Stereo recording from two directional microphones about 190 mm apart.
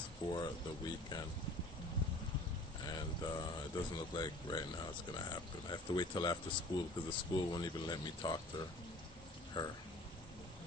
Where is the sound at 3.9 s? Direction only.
20° left (ahead or behind).